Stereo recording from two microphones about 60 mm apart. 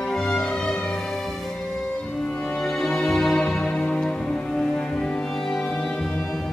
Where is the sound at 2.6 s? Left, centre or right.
Centre.